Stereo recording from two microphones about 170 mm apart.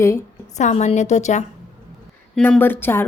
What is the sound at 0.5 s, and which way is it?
Speech, 45° left (ahead or behind).